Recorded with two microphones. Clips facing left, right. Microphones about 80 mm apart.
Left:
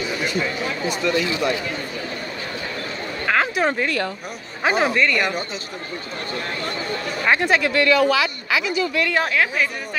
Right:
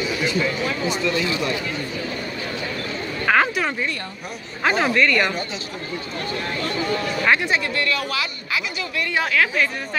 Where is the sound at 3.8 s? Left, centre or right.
Left.